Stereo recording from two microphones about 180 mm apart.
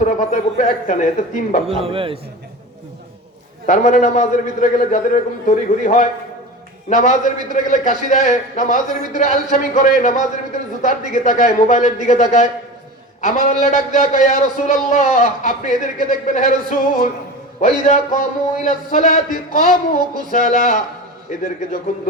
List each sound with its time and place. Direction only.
0.0 s a man's voice: 40° left (ahead or behind)
1.6 s a man's voice: 30° right (ahead or behind)
3.7 s a man's voice: 40° left (ahead or behind)